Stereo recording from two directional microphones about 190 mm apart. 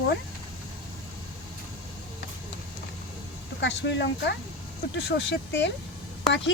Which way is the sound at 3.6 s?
65° left (ahead or behind).